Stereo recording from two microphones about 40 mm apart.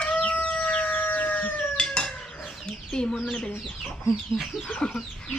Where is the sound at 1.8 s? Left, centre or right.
Left.